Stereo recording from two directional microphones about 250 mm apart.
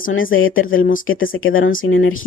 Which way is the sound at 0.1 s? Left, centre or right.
Left.